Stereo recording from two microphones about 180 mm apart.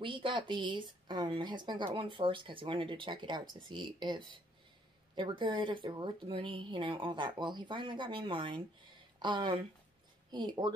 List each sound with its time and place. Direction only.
0.0 s speech: 30° right (ahead or behind)